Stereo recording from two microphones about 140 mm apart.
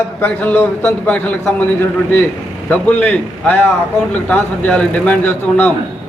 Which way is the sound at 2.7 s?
10° left (ahead or behind).